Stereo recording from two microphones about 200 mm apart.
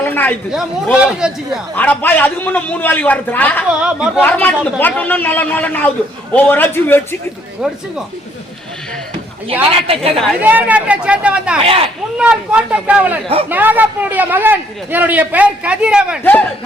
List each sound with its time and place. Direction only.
0.0 s a sound: 10° left (ahead or behind)
0.5 s a man's voice: 5° right (ahead or behind)
1.7 s a man's voice: 10° left (ahead or behind)
3.7 s a man's voice: 5° right (ahead or behind)
4.2 s a man's voice: 10° left (ahead or behind)
7.6 s a man's voice: 5° right (ahead or behind)
9.8 s a woman's voice: 30° right (ahead or behind)
10.4 s a man's voice: 5° right (ahead or behind)
11.6 s a woman's voice: 30° right (ahead or behind)
12.1 s a man's voice: 5° right (ahead or behind)
16.2 s a man's voice: 10° left (ahead or behind)